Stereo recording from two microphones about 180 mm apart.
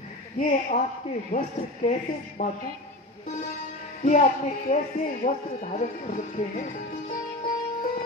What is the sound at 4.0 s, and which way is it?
Speech, 45° left (ahead or behind).